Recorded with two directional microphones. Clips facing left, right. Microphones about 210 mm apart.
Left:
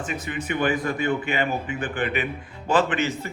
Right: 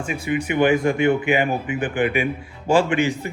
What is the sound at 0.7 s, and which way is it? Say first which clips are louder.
Speech: right 7 dB; 25° right (ahead or behind).